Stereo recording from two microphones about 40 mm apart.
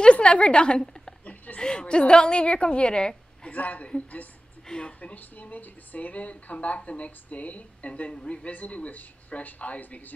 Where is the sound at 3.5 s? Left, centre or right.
Left.